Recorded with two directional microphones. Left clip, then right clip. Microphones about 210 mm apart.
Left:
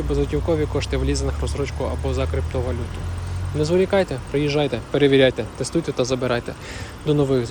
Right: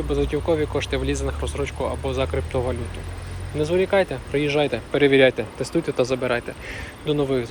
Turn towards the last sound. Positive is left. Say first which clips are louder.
# left 2 dB
turn(degrees=15)  # may be behind; listen again after turning